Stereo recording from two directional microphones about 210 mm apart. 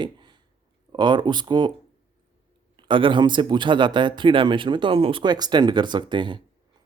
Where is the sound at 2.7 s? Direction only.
25° right (ahead or behind).